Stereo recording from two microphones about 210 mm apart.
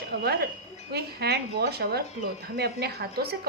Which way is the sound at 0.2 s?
50° right (ahead or behind).